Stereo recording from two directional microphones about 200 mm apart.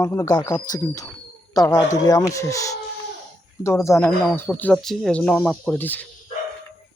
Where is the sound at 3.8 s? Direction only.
15° left (ahead or behind).